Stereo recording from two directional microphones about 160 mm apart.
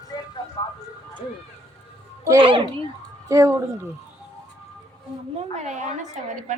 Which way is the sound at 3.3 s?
20° right (ahead or behind).